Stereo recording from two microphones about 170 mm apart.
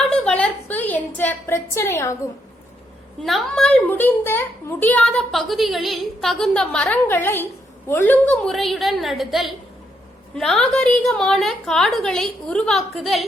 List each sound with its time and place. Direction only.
0.1 s a sound: 5° left (ahead or behind)
1.7 s a woman's voice: 15° left (ahead or behind)
3.2 s a woman's voice: centre (ahead or behind)